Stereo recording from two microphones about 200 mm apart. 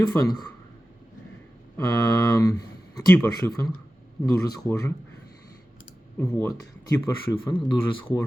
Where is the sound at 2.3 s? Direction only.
15° left (ahead or behind).